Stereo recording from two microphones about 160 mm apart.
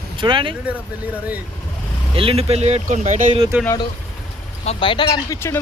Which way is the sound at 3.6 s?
20° left (ahead or behind).